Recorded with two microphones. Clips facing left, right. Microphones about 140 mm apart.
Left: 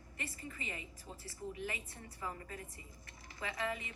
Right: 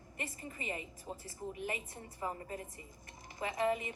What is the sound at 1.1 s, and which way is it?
Speech, 45° right (ahead or behind).